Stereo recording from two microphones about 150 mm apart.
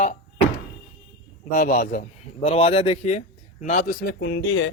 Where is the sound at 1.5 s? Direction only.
75° left (ahead or behind).